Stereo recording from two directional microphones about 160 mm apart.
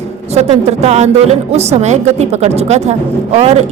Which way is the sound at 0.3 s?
45° right (ahead or behind).